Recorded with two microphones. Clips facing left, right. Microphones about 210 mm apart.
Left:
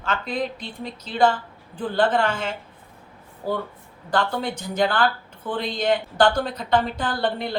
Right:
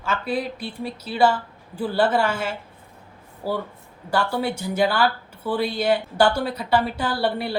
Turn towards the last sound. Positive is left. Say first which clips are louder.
# right 1 dB
turn(degrees=-10)  # may be behind; listen again after turning